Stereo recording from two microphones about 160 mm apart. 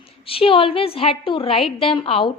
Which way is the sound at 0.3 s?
35° left (ahead or behind).